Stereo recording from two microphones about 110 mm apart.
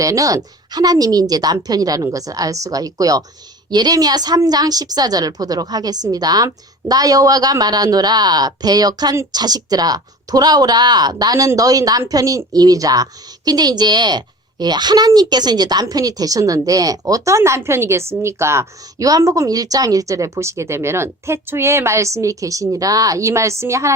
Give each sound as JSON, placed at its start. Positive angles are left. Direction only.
{"t": 0.0, "sound": "speech", "side_deg": -30}